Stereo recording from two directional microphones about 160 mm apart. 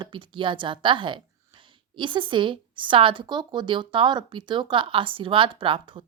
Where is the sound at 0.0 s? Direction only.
30° right (ahead or behind).